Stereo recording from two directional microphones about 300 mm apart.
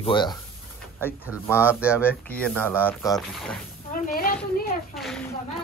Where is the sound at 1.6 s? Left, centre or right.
Centre.